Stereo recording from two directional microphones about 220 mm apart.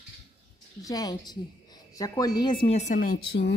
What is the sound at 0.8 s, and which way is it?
A woman's voice, 15° left (ahead or behind).